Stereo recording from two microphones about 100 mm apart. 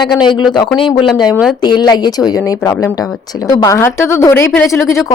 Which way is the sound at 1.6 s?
45° left (ahead or behind).